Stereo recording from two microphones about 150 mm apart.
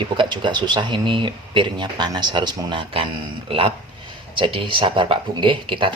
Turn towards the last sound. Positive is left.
turn(degrees=-35)  # may be behind; listen again after turning